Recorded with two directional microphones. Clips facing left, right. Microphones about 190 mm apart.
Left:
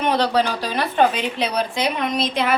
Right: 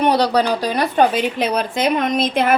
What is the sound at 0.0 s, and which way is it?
Speech, 35° right (ahead or behind).